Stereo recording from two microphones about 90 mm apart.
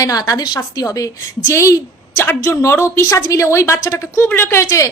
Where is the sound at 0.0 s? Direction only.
40° left (ahead or behind).